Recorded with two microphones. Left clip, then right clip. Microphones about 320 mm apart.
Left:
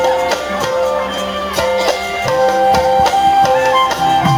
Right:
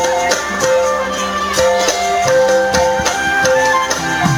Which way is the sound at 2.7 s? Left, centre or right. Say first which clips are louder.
Left 3 dB; left.